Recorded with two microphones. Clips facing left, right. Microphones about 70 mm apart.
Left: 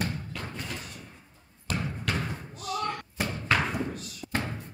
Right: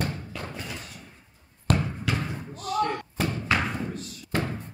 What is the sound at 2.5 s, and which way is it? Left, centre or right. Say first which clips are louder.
Slam: right 5 dB; right.